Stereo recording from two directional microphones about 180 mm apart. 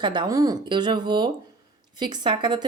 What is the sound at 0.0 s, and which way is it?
Speech, 25° right (ahead or behind).